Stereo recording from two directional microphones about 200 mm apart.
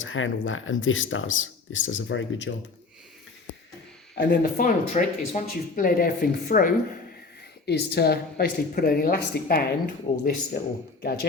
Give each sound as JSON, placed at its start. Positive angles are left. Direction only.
{"t": 0.0, "sound": "speech", "side_deg": 75}
{"t": 4.1, "sound": "speech", "side_deg": 60}
{"t": 4.6, "sound": "a woman's voice", "side_deg": 40}